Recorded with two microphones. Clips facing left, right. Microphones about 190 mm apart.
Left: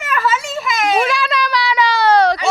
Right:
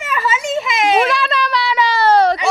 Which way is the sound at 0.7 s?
25° right (ahead or behind).